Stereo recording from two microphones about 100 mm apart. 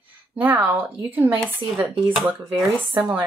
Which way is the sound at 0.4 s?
15° right (ahead or behind).